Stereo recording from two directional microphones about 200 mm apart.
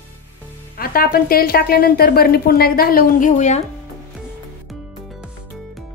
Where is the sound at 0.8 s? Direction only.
50° left (ahead or behind).